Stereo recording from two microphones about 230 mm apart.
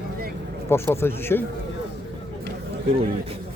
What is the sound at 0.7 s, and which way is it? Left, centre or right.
Speech, centre.